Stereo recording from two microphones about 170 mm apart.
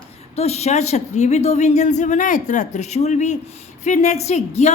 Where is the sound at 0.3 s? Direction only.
40° left (ahead or behind).